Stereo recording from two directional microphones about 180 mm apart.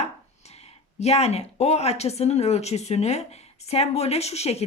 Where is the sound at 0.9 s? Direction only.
35° left (ahead or behind).